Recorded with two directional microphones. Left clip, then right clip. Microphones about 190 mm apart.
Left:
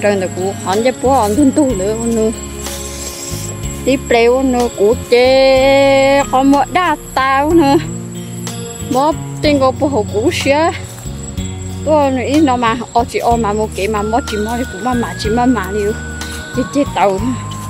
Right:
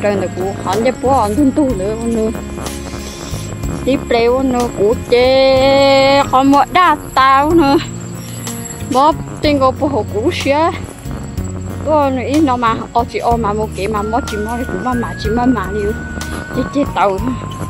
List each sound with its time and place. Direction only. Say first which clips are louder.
0.0 s speech: left 1 dB; 10° left (ahead or behind)
3.8 s speech: left 2 dB; 10° left (ahead or behind)
8.9 s speech: right 2 dB; 10° left (ahead or behind)
11.9 s speech: left 1 dB; 10° left (ahead or behind)